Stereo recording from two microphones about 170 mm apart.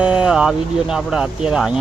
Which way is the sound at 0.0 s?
5° right (ahead or behind).